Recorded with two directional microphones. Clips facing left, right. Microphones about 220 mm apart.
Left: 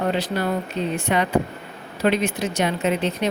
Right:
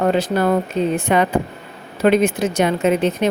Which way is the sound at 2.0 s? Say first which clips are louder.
Right 6 dB; 50° right (ahead or behind).